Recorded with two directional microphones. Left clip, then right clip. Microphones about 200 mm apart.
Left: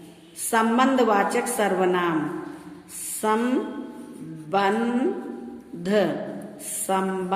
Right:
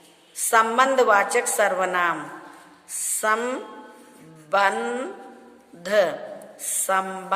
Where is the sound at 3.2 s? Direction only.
35° right (ahead or behind).